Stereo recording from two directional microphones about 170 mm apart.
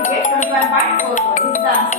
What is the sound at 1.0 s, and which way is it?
Speech, 50° left (ahead or behind).